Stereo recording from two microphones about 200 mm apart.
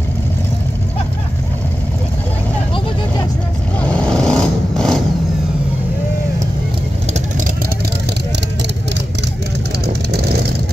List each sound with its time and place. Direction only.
3.8 s vehicle: 5° left (ahead or behind)
10.1 s vehicle: 50° right (ahead or behind)